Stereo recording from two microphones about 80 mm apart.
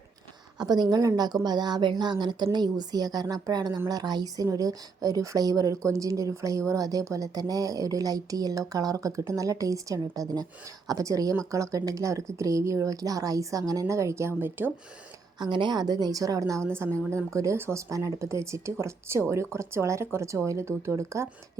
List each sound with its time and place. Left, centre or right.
0.6 s a woman's voice: right
15.4 s a woman's voice: right
16.6 s speech: right